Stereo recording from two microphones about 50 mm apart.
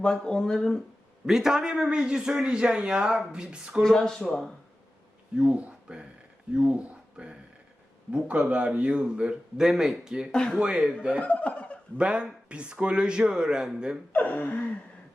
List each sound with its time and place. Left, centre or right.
0.0 s speech: centre
1.3 s a man's voice: centre
3.8 s speech: centre
5.4 s a man's voice: right
9.6 s a man's voice: centre
11.2 s laughter: left
11.9 s a man's voice: right
14.1 s gasp: left